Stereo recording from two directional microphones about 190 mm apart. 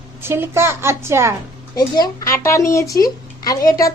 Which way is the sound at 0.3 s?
15° right (ahead or behind).